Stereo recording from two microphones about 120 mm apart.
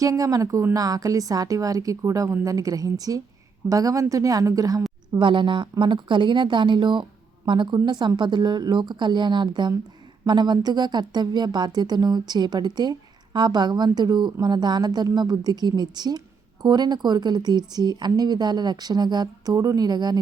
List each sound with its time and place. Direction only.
0.0 s a woman's voice: 30° right (ahead or behind)
5.1 s speech: 40° right (ahead or behind)